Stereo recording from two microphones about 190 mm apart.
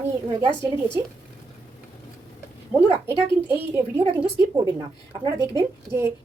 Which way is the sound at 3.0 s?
10° right (ahead or behind).